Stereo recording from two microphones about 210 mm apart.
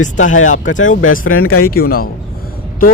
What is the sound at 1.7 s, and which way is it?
Speech, 45° left (ahead or behind).